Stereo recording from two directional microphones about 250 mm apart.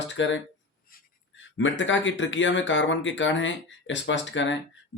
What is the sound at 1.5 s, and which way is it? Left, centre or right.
Speech, left.